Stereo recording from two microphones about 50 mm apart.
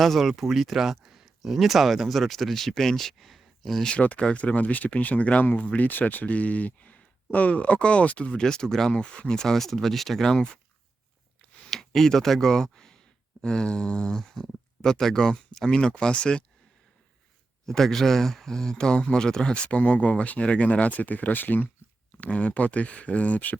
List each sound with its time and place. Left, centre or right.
0.0 s speech: centre
3.8 s speech: left; by 10.4 s centre
11.7 s speech: centre
17.7 s speech: centre; by 21.7 s left
22.2 s speech: left